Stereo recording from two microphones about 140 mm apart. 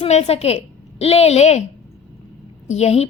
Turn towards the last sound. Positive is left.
turn(degrees=50)  # may be behind; listen again after turning